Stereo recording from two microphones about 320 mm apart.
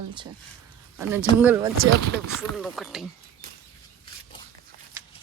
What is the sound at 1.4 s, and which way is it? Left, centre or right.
Speech, centre.